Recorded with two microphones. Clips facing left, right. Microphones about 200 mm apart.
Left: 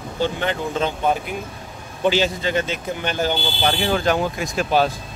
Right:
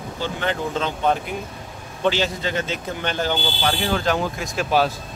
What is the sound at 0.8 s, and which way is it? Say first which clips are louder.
Speech: left 1 dB; 10° left (ahead or behind).